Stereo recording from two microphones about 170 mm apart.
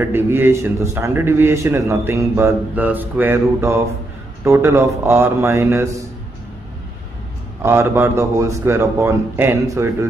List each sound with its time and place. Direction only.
0.0 s a man's voice: 15° right (ahead or behind)
7.6 s a man's voice: 15° right (ahead or behind)